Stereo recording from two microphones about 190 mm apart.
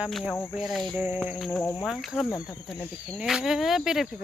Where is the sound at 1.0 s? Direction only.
10° right (ahead or behind).